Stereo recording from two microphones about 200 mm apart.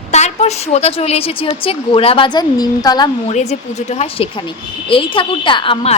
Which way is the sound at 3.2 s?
35° left (ahead or behind).